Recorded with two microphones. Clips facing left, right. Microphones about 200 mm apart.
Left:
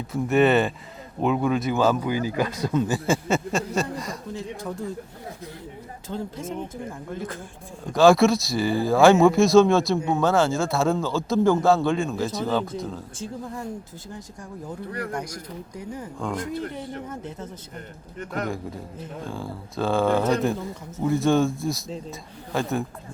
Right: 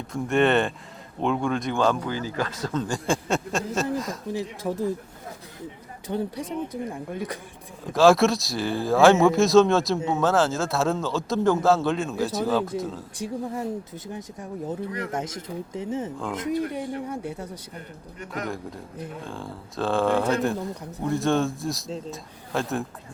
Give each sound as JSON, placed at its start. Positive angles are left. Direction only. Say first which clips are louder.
{"t": 0.1, "sound": "speech", "louder": "left 2 dB", "side_deg": 5}
{"t": 4.7, "sound": "speech", "louder": "right 6 dB", "side_deg": -20}
{"t": 6.1, "sound": "speech", "louder": "right 3 dB", "side_deg": -20}
{"t": 7.9, "sound": "speech", "louder": "left 1 dB", "side_deg": 0}
{"t": 13.5, "sound": "speech", "louder": "right 3 dB", "side_deg": -20}
{"t": 18.4, "sound": "speech", "louder": "left 2 dB", "side_deg": 0}